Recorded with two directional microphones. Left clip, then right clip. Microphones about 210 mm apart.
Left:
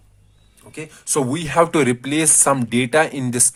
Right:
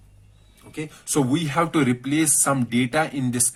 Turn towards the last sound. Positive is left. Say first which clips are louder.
# left 6 dB
turn(degrees=45)  # may be behind; listen again after turning